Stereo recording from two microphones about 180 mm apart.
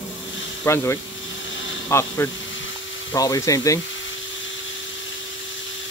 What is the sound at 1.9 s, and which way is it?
Speech, 15° left (ahead or behind).